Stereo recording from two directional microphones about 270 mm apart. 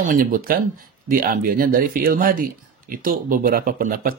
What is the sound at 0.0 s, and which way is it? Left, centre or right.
Speech, right.